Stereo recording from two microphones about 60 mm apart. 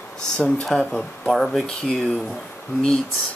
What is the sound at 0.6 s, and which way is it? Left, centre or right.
Speech, centre.